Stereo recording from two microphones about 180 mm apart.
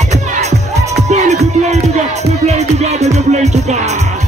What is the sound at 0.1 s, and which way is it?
Music, 40° right (ahead or behind).